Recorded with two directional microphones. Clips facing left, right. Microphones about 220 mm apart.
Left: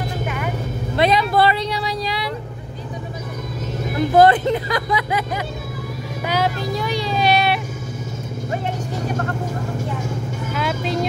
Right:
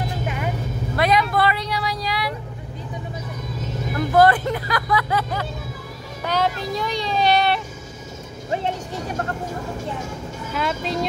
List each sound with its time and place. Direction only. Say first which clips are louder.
0.9 s vehicle: left 3 dB; 25° left (ahead or behind)
4.1 s speech: left 3 dB; 20° left (ahead or behind)
6.2 s child singing: left 1 dB; 5° left (ahead or behind)
10.5 s speech: left 1 dB; centre (ahead or behind)